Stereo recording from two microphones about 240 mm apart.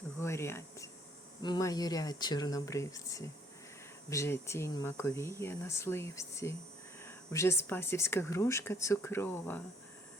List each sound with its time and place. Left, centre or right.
0.2 s speech: centre